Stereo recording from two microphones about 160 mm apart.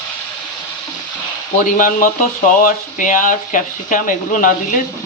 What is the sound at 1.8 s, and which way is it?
Speech, 60° left (ahead or behind).